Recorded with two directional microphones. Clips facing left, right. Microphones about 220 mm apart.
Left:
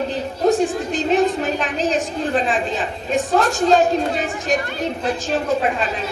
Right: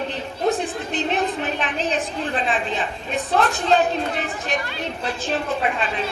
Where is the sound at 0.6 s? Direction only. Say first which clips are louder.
Left 5 dB; 45° left (ahead or behind).